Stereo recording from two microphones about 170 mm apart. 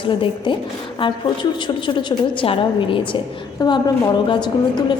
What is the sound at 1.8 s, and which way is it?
A woman's voice, 30° left (ahead or behind).